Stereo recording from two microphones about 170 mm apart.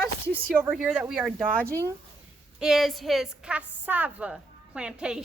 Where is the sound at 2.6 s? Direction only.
Centre (ahead or behind).